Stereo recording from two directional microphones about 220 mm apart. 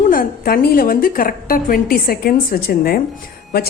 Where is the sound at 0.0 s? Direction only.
40° left (ahead or behind).